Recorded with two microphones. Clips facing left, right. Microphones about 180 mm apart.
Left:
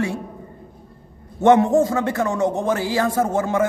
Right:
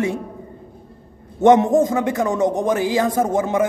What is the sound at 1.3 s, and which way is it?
A man's voice, 20° right (ahead or behind).